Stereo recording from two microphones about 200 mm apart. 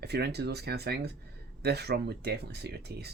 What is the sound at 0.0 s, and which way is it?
Speech, 55° right (ahead or behind).